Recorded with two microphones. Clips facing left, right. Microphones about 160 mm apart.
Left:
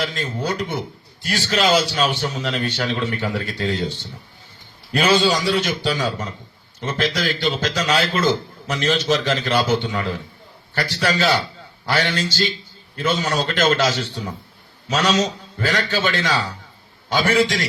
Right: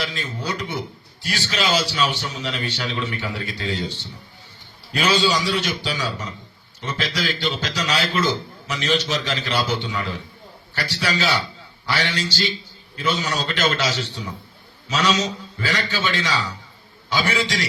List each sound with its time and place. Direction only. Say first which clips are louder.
0.0 s a man's voice: left 4 dB; 50° left (ahead or behind)